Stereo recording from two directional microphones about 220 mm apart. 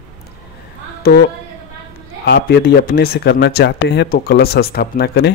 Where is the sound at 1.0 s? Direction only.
45° left (ahead or behind).